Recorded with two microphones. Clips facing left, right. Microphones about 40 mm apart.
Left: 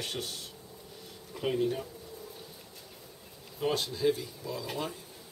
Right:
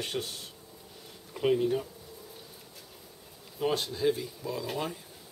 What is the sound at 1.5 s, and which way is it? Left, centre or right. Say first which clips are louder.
Speech: right 3 dB; centre.